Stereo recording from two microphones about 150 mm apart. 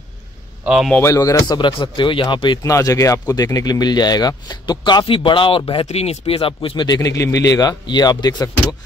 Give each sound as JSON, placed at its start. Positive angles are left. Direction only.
{"t": 0.7, "sound": "speech", "side_deg": -5}
{"t": 0.9, "sound": "speech", "side_deg": 20}